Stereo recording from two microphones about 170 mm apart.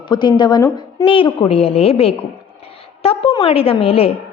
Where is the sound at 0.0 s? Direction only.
25° left (ahead or behind).